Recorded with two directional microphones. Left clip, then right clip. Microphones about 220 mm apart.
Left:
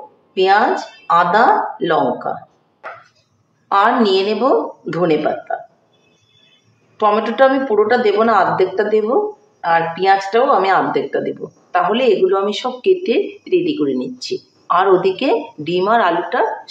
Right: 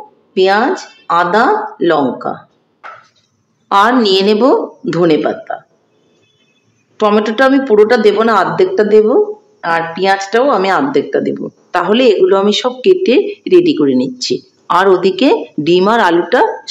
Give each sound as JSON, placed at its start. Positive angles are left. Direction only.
{"t": 0.3, "sound": "speech", "side_deg": -40}
{"t": 3.6, "sound": "a woman's voice", "side_deg": -55}
{"t": 7.0, "sound": "a woman's voice", "side_deg": -45}